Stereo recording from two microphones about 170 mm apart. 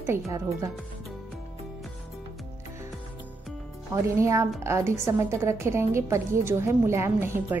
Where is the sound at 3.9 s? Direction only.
15° right (ahead or behind).